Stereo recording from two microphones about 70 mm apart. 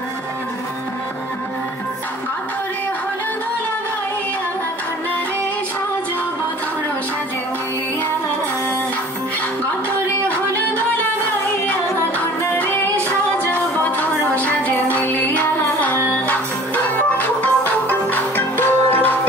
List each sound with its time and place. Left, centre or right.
12.4 s music: left